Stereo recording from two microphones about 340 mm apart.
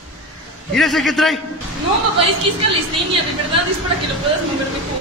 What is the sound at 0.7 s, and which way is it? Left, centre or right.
Speech, centre.